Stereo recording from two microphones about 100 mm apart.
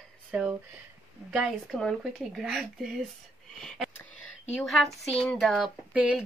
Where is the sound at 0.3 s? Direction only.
15° right (ahead or behind).